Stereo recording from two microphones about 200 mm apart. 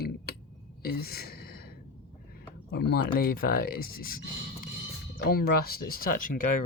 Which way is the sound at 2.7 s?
50° left (ahead or behind).